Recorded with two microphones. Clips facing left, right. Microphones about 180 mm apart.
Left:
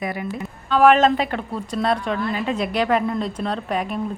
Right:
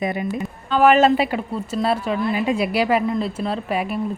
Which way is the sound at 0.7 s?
5° right (ahead or behind).